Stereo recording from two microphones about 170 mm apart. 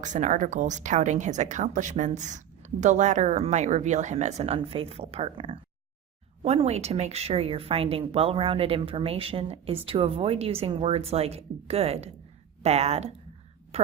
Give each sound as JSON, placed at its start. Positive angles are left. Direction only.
{"t": 0.0, "sound": "speech", "side_deg": -45}